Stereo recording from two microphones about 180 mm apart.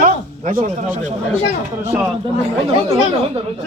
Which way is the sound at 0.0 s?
50° right (ahead or behind).